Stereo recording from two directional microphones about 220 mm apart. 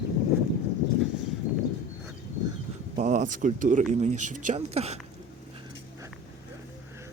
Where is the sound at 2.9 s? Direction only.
35° right (ahead or behind).